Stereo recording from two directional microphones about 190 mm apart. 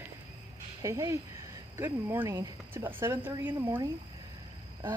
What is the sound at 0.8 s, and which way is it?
Speech, 15° right (ahead or behind).